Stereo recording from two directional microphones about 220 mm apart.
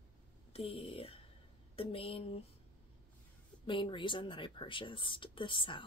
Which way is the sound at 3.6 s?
20° left (ahead or behind).